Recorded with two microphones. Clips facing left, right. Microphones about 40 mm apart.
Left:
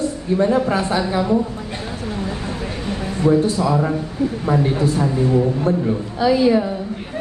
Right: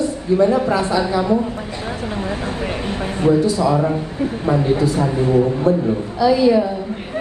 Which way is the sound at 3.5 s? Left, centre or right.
Right.